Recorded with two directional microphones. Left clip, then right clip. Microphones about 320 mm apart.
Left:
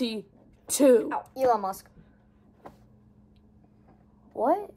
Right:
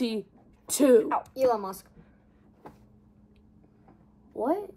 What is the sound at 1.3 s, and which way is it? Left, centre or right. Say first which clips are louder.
Speech: left 3 dB; centre.